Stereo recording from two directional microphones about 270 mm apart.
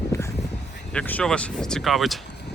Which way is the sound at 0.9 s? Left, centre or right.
Centre.